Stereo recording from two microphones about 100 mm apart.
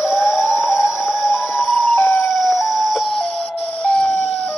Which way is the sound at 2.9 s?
Centre (ahead or behind).